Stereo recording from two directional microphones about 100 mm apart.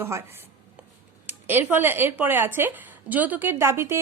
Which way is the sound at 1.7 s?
20° right (ahead or behind).